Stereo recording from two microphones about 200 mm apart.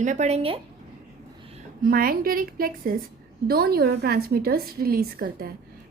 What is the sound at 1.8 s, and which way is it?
A woman's voice, 45° right (ahead or behind).